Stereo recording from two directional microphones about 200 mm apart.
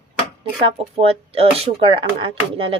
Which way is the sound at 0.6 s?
30° right (ahead or behind).